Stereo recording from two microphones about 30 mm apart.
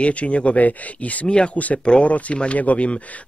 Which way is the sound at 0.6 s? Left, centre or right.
Left.